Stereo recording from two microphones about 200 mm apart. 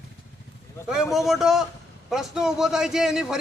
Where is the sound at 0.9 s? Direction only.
Centre (ahead or behind).